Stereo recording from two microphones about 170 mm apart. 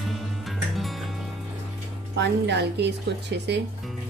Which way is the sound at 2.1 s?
90° right.